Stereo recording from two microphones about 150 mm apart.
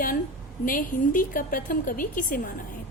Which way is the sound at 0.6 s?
65° left (ahead or behind).